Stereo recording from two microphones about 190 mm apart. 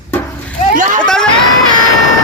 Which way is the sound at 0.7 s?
40° right (ahead or behind).